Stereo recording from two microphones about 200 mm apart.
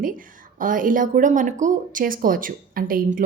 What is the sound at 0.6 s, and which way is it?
Speech, 40° right (ahead or behind).